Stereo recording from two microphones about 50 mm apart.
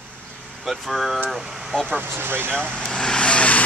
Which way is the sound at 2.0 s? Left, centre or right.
Right.